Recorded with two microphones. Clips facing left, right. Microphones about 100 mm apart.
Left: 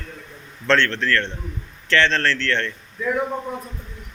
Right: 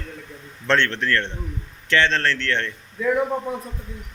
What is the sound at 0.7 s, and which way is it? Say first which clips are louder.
A man's voice: left 1 dB; 20° right (ahead or behind).